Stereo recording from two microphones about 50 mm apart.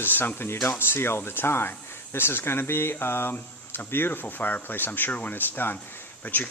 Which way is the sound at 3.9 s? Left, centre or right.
Left.